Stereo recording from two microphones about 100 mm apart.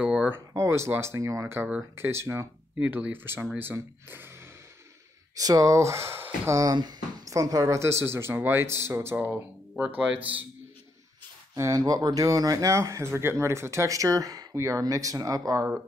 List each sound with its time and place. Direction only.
0.0 s a sound: 10° right (ahead or behind)
0.3 s speech: 30° right (ahead or behind)
5.3 s speech: 35° right (ahead or behind); by 10.1 s 15° right (ahead or behind)
11.5 s speech: 35° right (ahead or behind)